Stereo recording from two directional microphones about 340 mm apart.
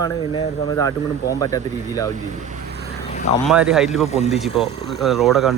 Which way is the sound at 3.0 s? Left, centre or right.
Centre.